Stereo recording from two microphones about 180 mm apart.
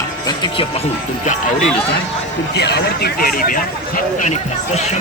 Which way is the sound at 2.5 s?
65° left (ahead or behind).